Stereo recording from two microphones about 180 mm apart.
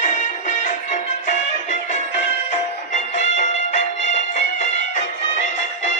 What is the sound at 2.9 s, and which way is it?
Music, 40° left (ahead or behind).